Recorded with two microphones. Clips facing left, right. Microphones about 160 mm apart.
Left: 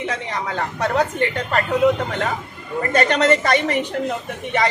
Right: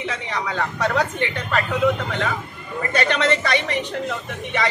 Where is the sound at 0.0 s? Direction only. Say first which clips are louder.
Left 2 dB; 45° left (ahead or behind).